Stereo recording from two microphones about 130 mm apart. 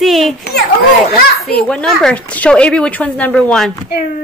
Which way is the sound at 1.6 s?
5° left (ahead or behind).